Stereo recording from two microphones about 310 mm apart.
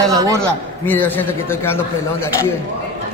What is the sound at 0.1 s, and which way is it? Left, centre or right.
Speech, centre.